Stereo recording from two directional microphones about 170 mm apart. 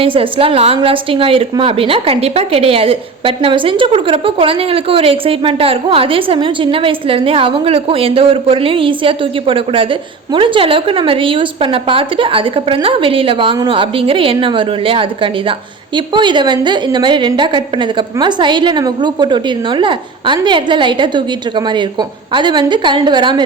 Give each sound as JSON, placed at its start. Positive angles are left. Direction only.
{"t": 0.0, "sound": "a woman's voice", "side_deg": -35}